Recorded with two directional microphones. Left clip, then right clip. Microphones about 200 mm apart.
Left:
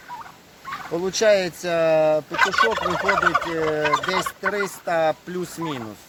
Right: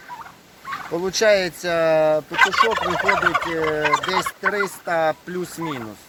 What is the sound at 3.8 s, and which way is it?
Fowl, 15° right (ahead or behind).